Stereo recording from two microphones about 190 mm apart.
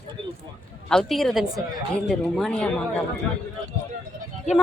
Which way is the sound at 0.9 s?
Centre (ahead or behind).